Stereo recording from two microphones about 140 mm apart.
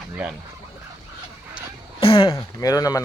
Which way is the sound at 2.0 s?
40° left (ahead or behind).